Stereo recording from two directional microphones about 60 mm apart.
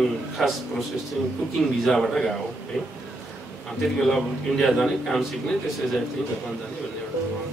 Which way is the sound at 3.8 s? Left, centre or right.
Centre.